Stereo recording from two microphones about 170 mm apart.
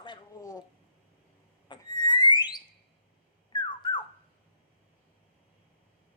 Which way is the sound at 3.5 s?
25° left (ahead or behind).